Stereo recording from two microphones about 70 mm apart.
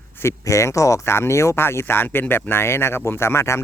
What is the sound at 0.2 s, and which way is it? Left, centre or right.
Speech, left.